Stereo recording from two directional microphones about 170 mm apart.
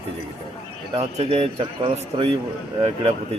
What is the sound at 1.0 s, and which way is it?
Speech, 35° right (ahead or behind).